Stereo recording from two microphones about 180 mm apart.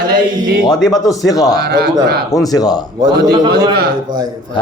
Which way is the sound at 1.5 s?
60° right (ahead or behind).